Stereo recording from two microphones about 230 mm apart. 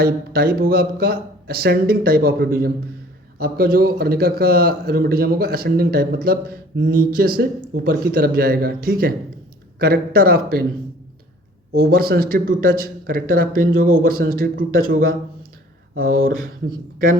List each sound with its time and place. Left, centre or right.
0.0 s a man's voice: right
11.7 s a man's voice: right